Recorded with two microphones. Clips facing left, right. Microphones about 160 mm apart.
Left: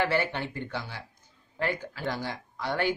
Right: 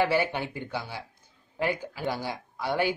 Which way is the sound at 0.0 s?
15° right (ahead or behind).